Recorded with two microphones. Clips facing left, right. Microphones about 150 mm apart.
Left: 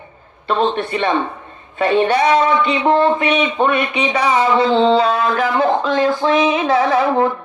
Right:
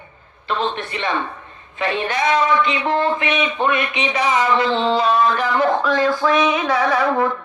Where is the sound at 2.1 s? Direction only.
30° left (ahead or behind).